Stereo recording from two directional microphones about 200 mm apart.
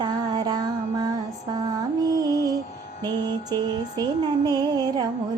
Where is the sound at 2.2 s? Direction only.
20° right (ahead or behind).